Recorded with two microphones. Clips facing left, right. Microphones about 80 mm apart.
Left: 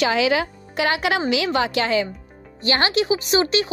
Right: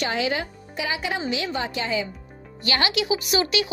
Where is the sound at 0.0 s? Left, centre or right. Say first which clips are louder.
Left 6 dB; left.